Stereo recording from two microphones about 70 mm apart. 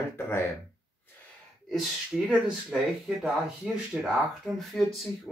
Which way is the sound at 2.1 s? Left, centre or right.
Centre.